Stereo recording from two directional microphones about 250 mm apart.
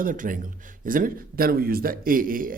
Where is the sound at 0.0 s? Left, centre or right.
Right.